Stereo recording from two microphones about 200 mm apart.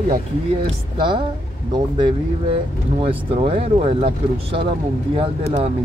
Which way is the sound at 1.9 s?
25° right (ahead or behind).